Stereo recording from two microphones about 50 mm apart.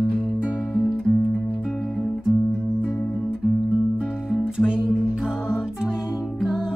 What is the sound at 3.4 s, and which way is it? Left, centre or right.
Music, centre.